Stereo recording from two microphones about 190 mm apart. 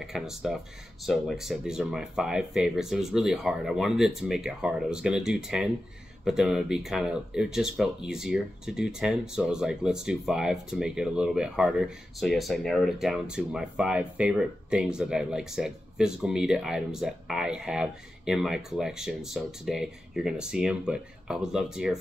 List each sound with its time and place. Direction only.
0.0 s speech: centre (ahead or behind)